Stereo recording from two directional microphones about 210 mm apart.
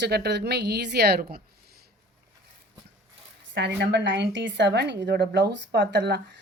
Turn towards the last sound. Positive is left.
turn(degrees=-55)  # may be behind; listen again after turning